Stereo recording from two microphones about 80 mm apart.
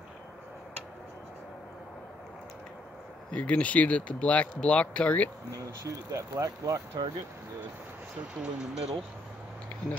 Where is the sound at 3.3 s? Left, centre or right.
Centre.